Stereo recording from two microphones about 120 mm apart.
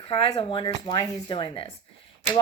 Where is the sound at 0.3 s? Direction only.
45° left (ahead or behind).